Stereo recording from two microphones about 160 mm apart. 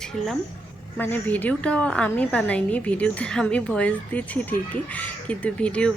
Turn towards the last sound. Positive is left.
turn(degrees=5)  # may be behind; listen again after turning